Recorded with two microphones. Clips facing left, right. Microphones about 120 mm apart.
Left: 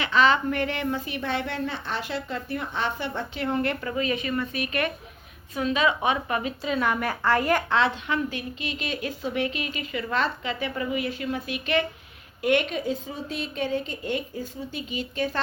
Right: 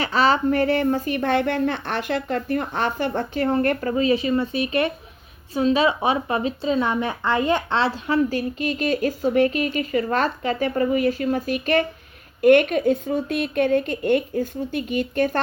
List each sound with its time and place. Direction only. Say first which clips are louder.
0.0 s a woman's voice: right 2 dB; 35° right (ahead or behind); by 15.4 s 55° right (ahead or behind)